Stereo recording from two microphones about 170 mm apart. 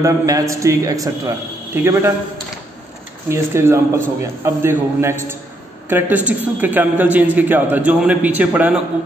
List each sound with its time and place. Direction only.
0.0 s a man's voice: 20° right (ahead or behind)
3.3 s a man's voice: 15° right (ahead or behind)